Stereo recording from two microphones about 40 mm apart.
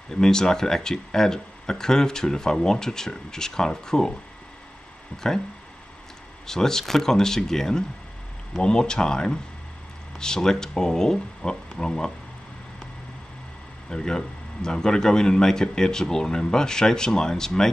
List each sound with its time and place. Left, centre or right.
0.1 s speech: centre
6.4 s speech: centre
13.8 s speech: centre